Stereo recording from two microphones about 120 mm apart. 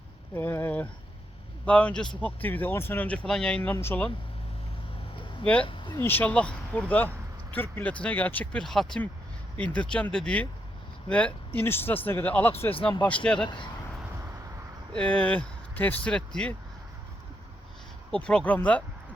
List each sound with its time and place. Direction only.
0.3 s speech: 15° left (ahead or behind)
3.2 s speech: 5° left (ahead or behind)
5.6 s speech: 45° left (ahead or behind)
6.0 s speech: 15° left (ahead or behind)
14.9 s speech: 10° left (ahead or behind)
18.1 s speech: 5° left (ahead or behind)